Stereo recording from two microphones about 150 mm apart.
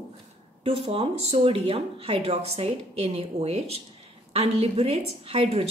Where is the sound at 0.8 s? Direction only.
40° right (ahead or behind).